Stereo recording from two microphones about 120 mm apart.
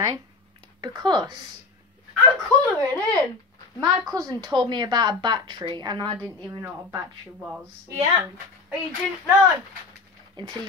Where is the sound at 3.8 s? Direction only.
30° right (ahead or behind).